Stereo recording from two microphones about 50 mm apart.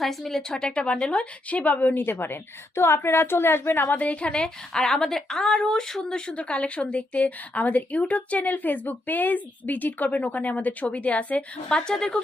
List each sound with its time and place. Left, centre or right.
0.0 s a woman's voice: centre; by 3.9 s left
3.9 s a woman's voice: left
11.7 s speech: centre